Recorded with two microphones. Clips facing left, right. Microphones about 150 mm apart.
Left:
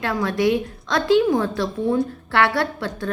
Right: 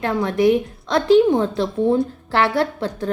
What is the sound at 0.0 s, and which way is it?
A woman's voice, 25° right (ahead or behind).